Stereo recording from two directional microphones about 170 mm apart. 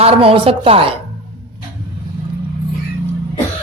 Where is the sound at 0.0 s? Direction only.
35° right (ahead or behind).